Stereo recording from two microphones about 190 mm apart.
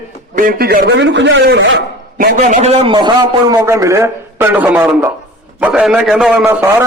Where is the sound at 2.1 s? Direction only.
45° right (ahead or behind).